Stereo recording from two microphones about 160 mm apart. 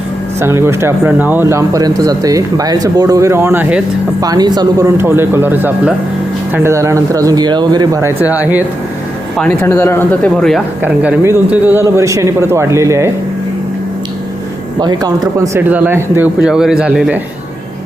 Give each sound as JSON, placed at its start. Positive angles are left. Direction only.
{"t": 0.3, "sound": "a man's voice", "side_deg": -15}
{"t": 4.2, "sound": "a man's voice", "side_deg": -25}
{"t": 8.2, "sound": "a man's voice", "side_deg": -10}
{"t": 9.4, "sound": "speech", "side_deg": 10}
{"t": 10.8, "sound": "a man's voice", "side_deg": -15}
{"t": 14.8, "sound": "speech", "side_deg": -25}
{"t": 15.4, "sound": "a man's voice", "side_deg": -15}